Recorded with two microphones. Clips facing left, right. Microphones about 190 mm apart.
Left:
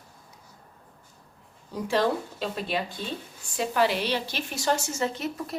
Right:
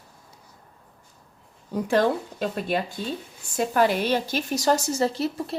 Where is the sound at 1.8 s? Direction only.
50° right (ahead or behind).